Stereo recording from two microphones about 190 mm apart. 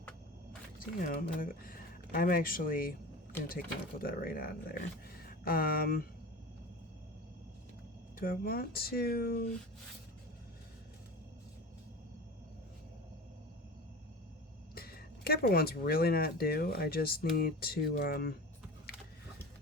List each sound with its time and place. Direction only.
0.8 s speech: 45° left (ahead or behind)
8.2 s speech: 50° left (ahead or behind)
14.8 s speech: 50° left (ahead or behind)
18.9 s a sound: 50° left (ahead or behind)